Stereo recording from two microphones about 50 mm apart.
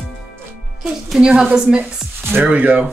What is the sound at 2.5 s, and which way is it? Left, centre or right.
Speech, right.